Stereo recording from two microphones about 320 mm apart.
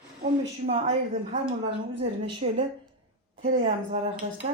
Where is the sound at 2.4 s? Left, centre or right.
Centre.